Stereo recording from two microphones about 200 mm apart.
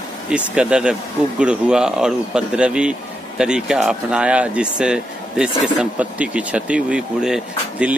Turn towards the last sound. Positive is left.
turn(degrees=-5)  # may be behind; listen again after turning